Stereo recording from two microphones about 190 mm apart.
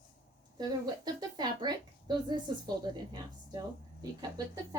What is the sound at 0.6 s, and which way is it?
A woman's voice, 20° right (ahead or behind).